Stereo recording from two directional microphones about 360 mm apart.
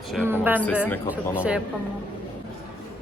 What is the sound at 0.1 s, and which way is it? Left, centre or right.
Speech, centre.